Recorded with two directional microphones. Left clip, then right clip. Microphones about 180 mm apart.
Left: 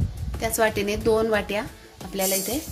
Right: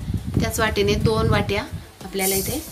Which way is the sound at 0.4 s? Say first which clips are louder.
Right 1 dB; 25° left (ahead or behind).